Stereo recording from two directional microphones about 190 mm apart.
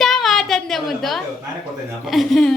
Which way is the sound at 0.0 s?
Centre (ahead or behind).